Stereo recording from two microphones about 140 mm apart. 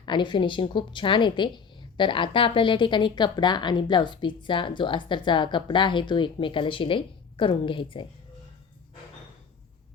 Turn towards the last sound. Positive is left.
turn(degrees=35)  # may be behind; listen again after turning